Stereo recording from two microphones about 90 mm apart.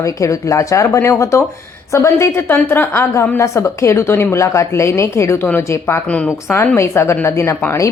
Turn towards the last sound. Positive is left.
turn(degrees=30)  # may be behind; listen again after turning